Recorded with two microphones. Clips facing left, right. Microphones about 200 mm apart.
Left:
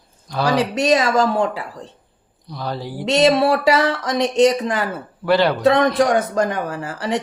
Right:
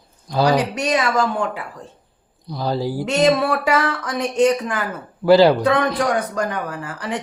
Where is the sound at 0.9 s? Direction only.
40° left (ahead or behind).